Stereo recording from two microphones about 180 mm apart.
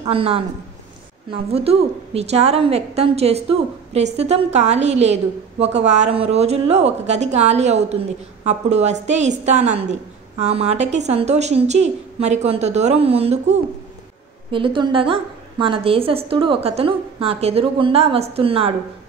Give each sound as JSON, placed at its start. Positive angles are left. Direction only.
{"t": 0.0, "sound": "a woman's voice", "side_deg": -30}
{"t": 1.5, "sound": "a woman's voice", "side_deg": -35}